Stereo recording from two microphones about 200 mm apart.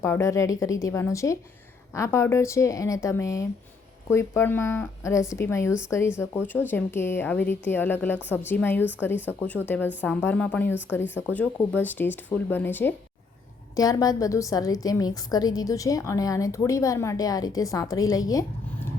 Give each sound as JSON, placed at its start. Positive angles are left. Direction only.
{"t": 0.0, "sound": "a woman's voice", "side_deg": 15}